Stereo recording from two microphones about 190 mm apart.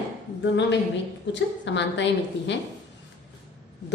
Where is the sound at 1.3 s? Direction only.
70° left (ahead or behind).